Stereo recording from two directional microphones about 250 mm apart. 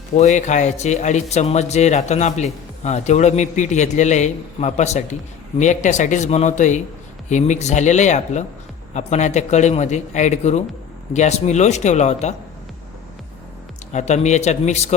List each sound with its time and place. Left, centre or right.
0.2 s speech: left
13.9 s speech: left